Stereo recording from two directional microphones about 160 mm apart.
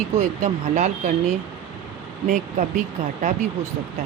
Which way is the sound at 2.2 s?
50° right (ahead or behind).